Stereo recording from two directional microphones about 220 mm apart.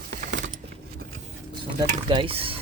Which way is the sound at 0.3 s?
50° right (ahead or behind).